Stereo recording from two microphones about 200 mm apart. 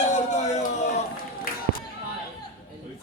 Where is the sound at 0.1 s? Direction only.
35° left (ahead or behind).